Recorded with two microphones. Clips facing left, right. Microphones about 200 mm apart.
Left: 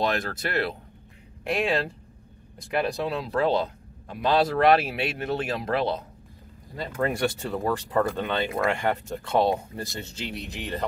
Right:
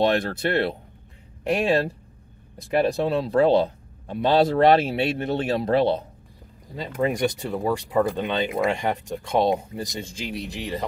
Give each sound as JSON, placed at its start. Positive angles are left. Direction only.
{"t": 0.0, "sound": "speech", "side_deg": -30}
{"t": 2.8, "sound": "speech", "side_deg": -30}
{"t": 6.8, "sound": "speech", "side_deg": -15}